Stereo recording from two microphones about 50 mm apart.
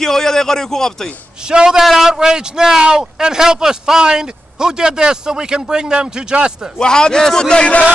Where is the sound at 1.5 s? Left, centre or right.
Centre.